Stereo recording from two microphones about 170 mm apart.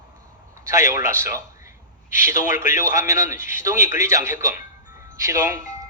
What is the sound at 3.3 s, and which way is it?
Speech, 50° left (ahead or behind).